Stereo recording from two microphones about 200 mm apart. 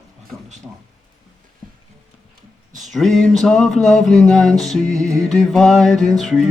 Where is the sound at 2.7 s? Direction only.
40° right (ahead or behind).